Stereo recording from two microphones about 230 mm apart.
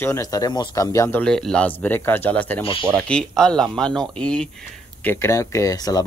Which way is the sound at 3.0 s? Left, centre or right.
Centre.